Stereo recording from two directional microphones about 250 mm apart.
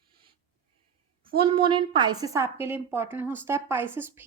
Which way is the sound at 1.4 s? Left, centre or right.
Right.